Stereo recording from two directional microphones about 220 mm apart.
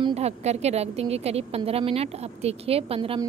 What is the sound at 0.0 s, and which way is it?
A woman's voice, 30° right (ahead or behind).